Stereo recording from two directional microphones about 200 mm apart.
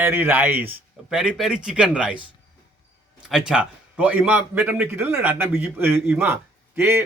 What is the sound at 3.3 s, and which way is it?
Speech, 5° right (ahead or behind).